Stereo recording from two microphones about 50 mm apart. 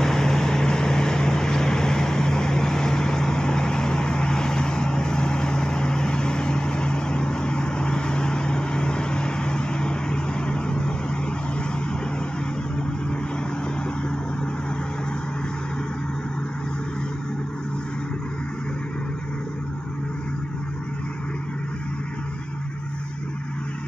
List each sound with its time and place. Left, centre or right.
0.0 s vehicle: centre